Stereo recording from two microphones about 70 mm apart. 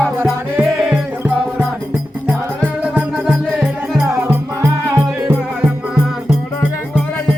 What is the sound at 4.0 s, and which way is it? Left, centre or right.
Music, right.